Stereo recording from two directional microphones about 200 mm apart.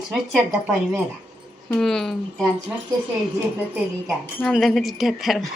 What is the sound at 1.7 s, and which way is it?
Speech, centre (ahead or behind).